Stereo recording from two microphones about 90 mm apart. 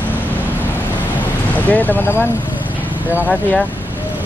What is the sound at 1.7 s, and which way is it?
Speech, 20° left (ahead or behind).